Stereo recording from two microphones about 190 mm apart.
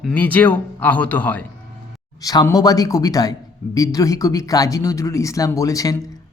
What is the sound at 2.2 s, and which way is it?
A man's voice, 20° left (ahead or behind).